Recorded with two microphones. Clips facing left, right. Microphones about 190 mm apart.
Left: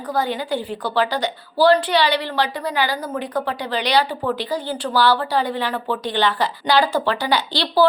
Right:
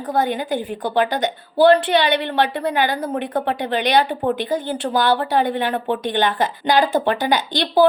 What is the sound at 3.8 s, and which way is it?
Speech, 50° right (ahead or behind).